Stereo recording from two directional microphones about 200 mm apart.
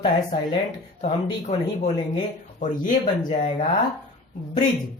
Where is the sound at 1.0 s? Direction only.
35° left (ahead or behind).